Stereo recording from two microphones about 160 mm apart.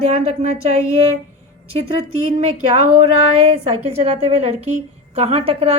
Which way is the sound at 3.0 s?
40° right (ahead or behind).